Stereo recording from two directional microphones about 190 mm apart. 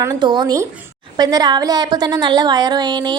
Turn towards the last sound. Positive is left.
turn(degrees=-20)  # may be behind; listen again after turning